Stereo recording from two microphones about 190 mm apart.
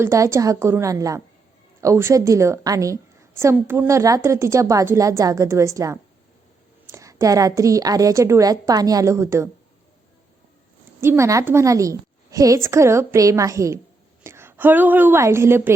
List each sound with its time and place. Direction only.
0.0 s a woman's voice: 15° right (ahead or behind)
11.0 s a woman's voice: 15° right (ahead or behind)